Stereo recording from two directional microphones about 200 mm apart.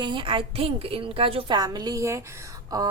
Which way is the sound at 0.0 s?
25° right (ahead or behind).